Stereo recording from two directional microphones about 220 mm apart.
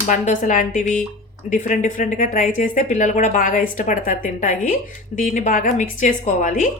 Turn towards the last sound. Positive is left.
turn(degrees=35)  # may be behind; listen again after turning